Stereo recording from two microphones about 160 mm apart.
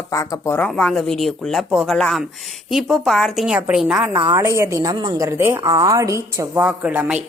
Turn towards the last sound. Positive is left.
turn(degrees=-10)  # may be behind; listen again after turning